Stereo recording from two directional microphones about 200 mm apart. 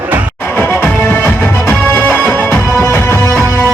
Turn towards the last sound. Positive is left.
turn(degrees=10)  # may be behind; listen again after turning